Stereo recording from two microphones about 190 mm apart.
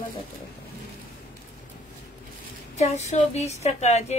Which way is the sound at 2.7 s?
35° left (ahead or behind).